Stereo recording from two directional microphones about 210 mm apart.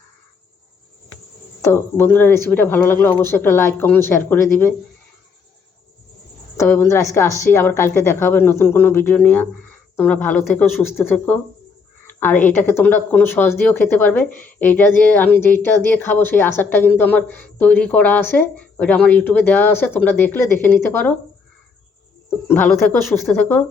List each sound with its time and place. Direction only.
1.6 s speech: 10° left (ahead or behind)
6.6 s speech: 10° left (ahead or behind)
22.4 s speech: 10° left (ahead or behind)